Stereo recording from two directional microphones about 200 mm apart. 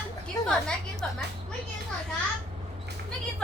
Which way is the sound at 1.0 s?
5° left (ahead or behind).